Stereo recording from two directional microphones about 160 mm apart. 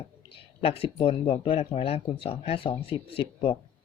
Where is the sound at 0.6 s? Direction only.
35° left (ahead or behind).